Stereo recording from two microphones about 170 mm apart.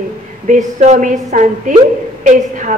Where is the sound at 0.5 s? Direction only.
45° right (ahead or behind).